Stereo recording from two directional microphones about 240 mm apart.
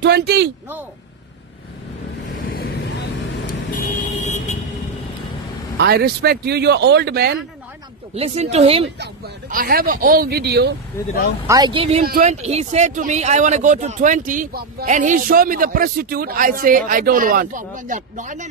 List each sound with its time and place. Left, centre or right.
0.0 s speech: right
2.5 s vehicle: left
4.2 s vehicle: left
5.8 s speech: right
8.1 s speech: right
9.0 s speech: right
11.4 s speech: centre
12.0 s speech: right